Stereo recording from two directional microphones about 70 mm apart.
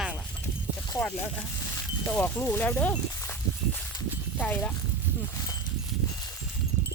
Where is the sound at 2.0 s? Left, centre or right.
Left.